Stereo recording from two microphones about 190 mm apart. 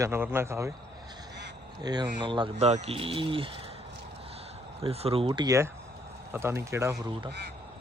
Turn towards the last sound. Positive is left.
turn(degrees=-60)  # may be behind; listen again after turning